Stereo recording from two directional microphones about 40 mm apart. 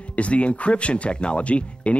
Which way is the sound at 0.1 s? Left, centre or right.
Left.